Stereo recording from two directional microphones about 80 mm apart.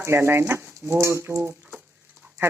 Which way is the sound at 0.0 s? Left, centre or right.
Right.